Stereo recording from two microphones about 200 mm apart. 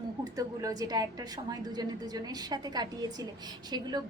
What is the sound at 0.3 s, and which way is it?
A woman's voice, 15° right (ahead or behind).